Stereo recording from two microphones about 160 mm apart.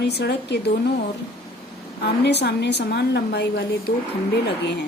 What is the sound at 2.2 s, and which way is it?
A woman's voice, 90° left.